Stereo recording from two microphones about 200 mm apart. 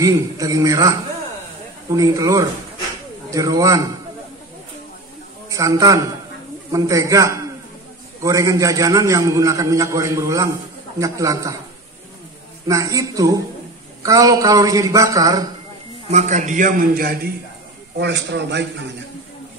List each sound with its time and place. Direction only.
0.0 s a man's voice: 15° right (ahead or behind)
2.0 s a man's voice: 15° right (ahead or behind)
5.5 s a man's voice: 15° right (ahead or behind)
12.6 s a man's voice: 15° right (ahead or behind)
16.1 s a man's voice: 35° right (ahead or behind); by 18.7 s 60° right (ahead or behind)